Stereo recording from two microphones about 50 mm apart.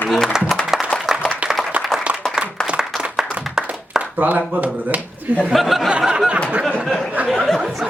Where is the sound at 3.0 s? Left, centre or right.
Centre.